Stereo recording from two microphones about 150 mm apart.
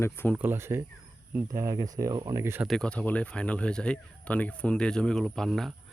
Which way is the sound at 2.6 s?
Centre (ahead or behind).